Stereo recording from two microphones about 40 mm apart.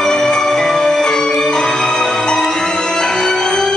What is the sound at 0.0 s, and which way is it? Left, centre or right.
Music, centre.